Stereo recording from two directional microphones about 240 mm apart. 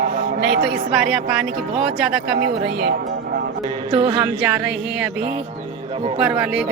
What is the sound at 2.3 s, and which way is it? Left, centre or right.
Speech, right.